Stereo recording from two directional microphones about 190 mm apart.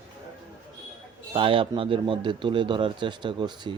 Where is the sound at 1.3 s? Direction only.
30° right (ahead or behind).